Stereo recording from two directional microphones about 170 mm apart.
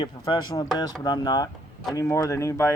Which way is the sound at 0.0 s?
25° left (ahead or behind).